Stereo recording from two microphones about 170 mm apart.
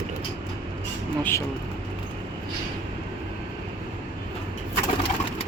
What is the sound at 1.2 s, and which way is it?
Speech, 15° left (ahead or behind).